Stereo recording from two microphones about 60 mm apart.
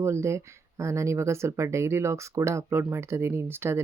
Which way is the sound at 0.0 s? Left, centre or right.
Right.